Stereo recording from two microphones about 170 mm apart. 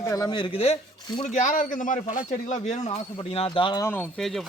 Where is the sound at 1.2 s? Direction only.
45° left (ahead or behind).